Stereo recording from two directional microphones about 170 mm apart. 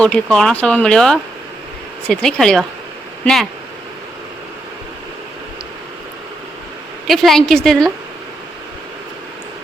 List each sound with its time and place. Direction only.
0.0 s speech: 5° left (ahead or behind)
7.1 s speech: centre (ahead or behind)